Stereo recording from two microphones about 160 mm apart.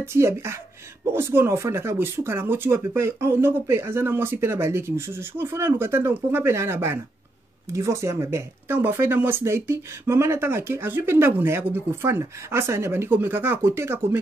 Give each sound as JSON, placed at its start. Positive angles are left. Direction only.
{"t": 0.0, "sound": "speech", "side_deg": -15}